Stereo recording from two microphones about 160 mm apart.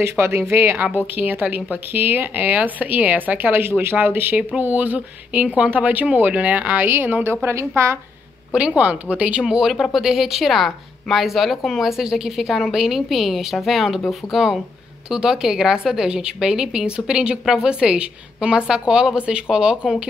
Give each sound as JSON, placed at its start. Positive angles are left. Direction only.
{"t": 0.2, "sound": "a woman's voice", "side_deg": -15}